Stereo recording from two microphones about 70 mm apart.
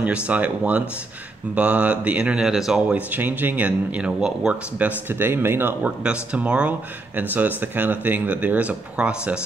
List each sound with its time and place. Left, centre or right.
0.0 s speech: centre
2.9 s speech: right
5.1 s speech: right; by 9.4 s centre